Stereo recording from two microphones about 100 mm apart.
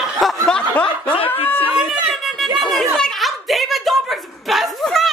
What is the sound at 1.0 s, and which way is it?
Snicker, 65° left (ahead or behind).